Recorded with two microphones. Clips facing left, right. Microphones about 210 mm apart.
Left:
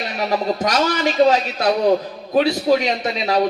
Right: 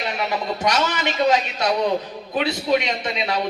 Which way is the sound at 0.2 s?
35° left (ahead or behind).